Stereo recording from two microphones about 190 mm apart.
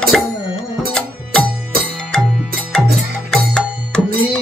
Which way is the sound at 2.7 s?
5° left (ahead or behind).